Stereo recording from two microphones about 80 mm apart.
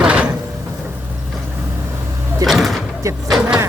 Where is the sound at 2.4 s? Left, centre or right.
Centre.